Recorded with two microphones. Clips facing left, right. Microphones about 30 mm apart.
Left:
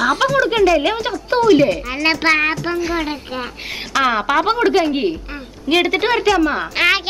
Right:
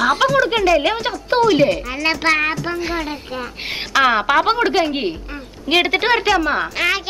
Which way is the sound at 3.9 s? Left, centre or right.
Centre.